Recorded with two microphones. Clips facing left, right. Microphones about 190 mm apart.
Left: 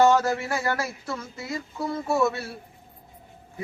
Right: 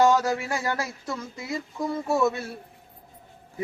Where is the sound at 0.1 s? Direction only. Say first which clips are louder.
Left 1 dB; 15° right (ahead or behind).